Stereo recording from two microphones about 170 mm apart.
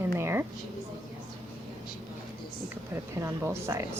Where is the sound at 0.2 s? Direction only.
15° right (ahead or behind).